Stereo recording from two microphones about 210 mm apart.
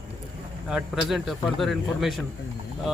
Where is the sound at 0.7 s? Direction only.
Centre (ahead or behind).